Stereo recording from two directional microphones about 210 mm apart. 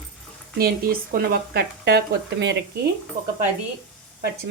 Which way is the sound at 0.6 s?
45° right (ahead or behind).